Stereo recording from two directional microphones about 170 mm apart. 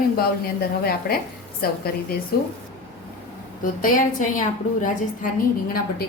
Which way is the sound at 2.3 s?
65° left (ahead or behind).